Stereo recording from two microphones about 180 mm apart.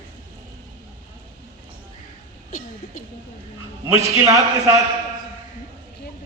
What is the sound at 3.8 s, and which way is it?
Speech, 15° right (ahead or behind).